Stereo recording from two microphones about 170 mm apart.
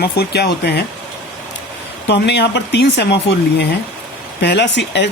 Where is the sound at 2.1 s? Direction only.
90° left.